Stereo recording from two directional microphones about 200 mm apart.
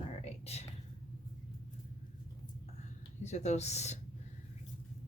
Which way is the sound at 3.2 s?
35° left (ahead or behind).